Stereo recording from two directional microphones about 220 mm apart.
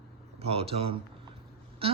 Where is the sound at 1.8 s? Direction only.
25° right (ahead or behind).